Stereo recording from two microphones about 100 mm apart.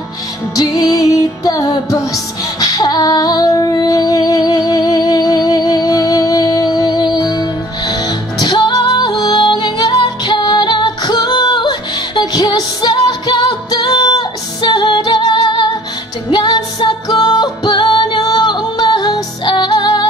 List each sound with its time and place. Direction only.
0.6 s music: 40° left (ahead or behind)